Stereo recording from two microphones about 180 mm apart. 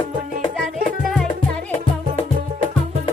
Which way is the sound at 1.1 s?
5° left (ahead or behind).